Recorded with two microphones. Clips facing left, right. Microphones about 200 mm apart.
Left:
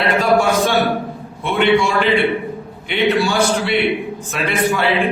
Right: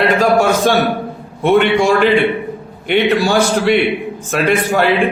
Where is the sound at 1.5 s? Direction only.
45° right (ahead or behind).